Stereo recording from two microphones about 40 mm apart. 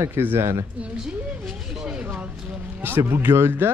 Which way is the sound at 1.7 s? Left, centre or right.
Centre.